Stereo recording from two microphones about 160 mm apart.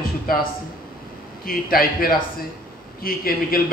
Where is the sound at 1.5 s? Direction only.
65° left (ahead or behind).